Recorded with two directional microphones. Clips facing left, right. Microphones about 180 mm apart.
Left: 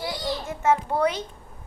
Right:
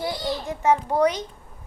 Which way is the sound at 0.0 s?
15° right (ahead or behind).